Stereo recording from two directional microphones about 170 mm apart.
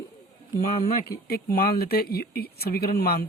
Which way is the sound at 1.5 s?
60° left (ahead or behind).